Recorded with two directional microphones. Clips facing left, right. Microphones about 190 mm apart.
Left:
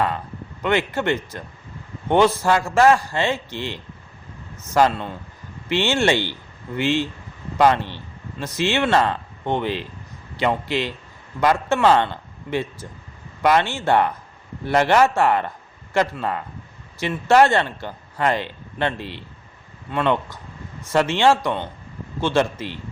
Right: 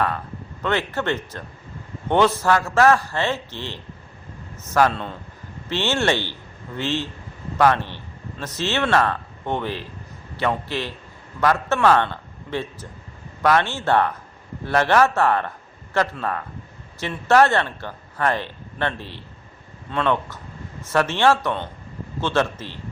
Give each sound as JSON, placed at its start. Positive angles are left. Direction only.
{"t": 0.6, "sound": "a man's voice", "side_deg": 15}